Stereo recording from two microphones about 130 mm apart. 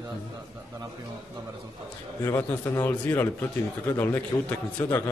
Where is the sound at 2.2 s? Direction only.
20° left (ahead or behind).